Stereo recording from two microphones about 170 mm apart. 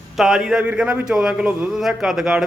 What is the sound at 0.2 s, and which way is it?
A man's voice, 5° right (ahead or behind).